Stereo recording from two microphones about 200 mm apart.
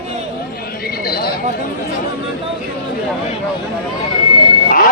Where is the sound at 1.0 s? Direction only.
50° left (ahead or behind).